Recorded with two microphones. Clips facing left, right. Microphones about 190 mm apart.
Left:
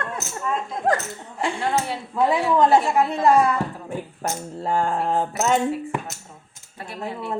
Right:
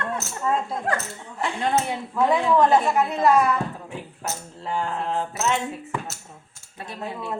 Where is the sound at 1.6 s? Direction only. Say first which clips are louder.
Right 2 dB; 20° right (ahead or behind).